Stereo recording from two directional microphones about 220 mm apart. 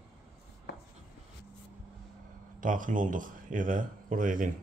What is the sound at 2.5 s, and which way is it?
Speech, 35° right (ahead or behind).